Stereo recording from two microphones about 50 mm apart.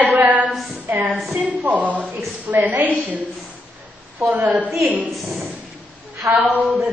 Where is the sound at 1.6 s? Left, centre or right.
Right.